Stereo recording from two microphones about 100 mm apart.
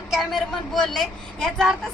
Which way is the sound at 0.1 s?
Centre (ahead or behind).